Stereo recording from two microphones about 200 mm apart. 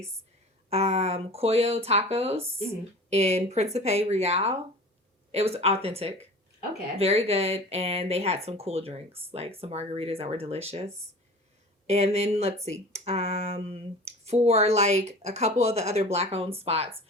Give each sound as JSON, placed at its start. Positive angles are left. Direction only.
{"t": 0.7, "sound": "speech", "side_deg": -30}